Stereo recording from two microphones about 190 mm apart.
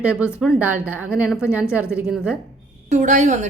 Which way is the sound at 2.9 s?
40° right (ahead or behind).